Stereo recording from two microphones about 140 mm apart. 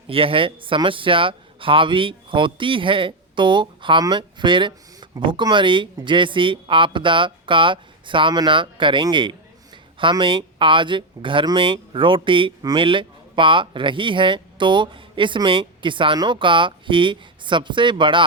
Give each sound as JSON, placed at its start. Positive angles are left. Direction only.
{"t": 0.1, "sound": "speech", "side_deg": -40}